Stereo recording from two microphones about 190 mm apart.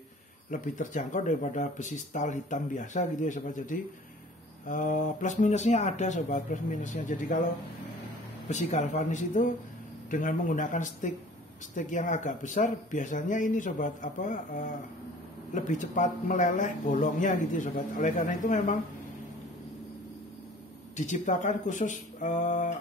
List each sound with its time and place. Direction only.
0.5 s speech: 40° left (ahead or behind)
8.5 s speech: 40° left (ahead or behind)
20.9 s speech: 40° left (ahead or behind)